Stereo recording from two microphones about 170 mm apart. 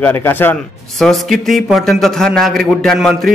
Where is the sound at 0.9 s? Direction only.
Centre (ahead or behind).